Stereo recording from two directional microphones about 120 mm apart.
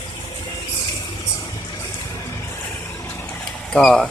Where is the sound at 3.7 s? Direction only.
5° left (ahead or behind).